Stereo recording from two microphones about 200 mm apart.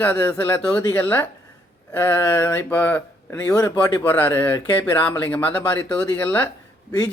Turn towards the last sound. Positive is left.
turn(degrees=15)  # may be behind; listen again after turning